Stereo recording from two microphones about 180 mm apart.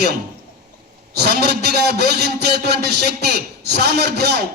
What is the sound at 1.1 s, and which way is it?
A man's voice, 65° right (ahead or behind).